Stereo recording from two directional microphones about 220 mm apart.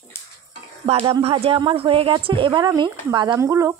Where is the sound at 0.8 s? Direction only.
25° right (ahead or behind).